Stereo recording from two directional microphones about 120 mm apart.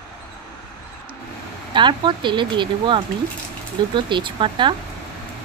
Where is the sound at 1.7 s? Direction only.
40° right (ahead or behind).